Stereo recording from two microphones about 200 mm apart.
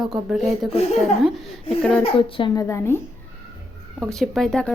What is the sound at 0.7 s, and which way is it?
Speech, 30° left (ahead or behind).